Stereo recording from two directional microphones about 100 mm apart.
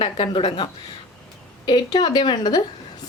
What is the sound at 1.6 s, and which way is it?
A woman's voice, 45° left (ahead or behind).